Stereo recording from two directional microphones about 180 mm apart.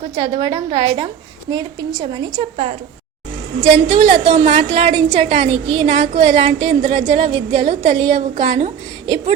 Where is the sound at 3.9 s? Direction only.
40° right (ahead or behind).